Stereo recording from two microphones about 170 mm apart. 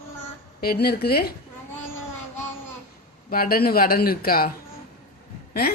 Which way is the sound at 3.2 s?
60° left (ahead or behind).